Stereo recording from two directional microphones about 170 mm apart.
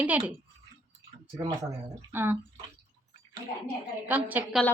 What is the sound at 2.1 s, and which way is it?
Speech, 10° right (ahead or behind).